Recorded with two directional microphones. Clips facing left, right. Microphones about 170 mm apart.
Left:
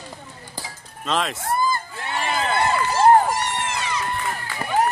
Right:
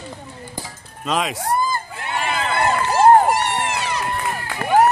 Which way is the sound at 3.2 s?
70° right (ahead or behind).